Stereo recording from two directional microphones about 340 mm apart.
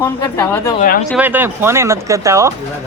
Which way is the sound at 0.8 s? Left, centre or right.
Left.